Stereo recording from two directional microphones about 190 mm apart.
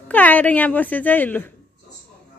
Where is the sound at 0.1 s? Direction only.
10° left (ahead or behind).